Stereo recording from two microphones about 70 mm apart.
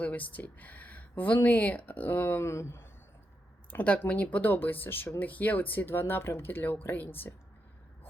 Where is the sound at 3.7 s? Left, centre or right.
Centre.